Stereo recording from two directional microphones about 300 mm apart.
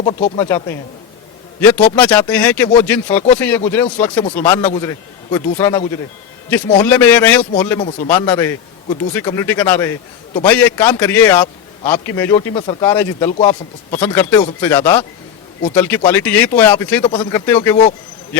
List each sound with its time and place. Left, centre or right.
0.0 s speech: left
0.3 s speech: centre
6.8 s speech: centre
13.4 s speech: left
14.0 s speech: centre